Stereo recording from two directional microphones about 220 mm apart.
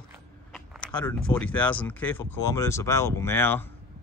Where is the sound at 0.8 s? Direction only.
5° left (ahead or behind).